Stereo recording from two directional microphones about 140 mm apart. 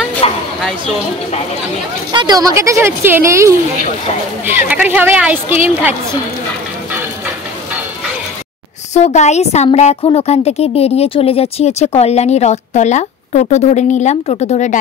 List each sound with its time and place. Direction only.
0.2 s a sound: 45° left (ahead or behind)
2.1 s a woman's voice: 30° right (ahead or behind); by 5.9 s 15° right (ahead or behind)
8.9 s a woman's voice: 55° left (ahead or behind)